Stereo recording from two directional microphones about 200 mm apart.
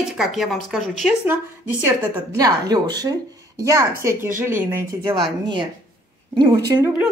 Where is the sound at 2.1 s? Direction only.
20° right (ahead or behind).